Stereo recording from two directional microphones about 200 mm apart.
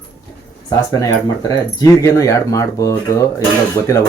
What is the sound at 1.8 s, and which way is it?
Speech, 15° left (ahead or behind).